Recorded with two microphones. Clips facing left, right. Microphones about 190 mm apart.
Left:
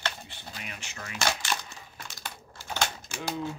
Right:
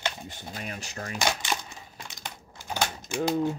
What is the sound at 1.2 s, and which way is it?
Crumpling, 20° right (ahead or behind).